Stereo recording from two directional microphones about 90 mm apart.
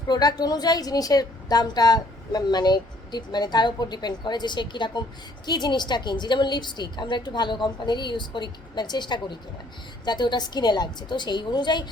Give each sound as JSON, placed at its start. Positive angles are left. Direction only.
{"t": 0.1, "sound": "a woman's voice", "side_deg": 50}